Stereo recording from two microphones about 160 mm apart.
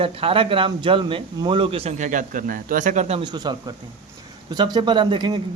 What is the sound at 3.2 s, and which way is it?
A man's voice, 25° right (ahead or behind).